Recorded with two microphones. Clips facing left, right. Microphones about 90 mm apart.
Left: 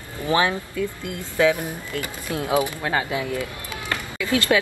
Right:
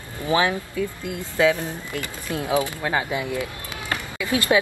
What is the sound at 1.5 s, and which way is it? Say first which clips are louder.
Speech: even; 15° left (ahead or behind).